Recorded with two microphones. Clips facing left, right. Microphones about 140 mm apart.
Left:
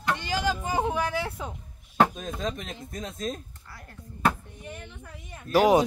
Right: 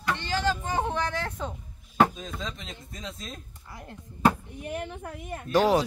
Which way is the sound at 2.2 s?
50° left (ahead or behind).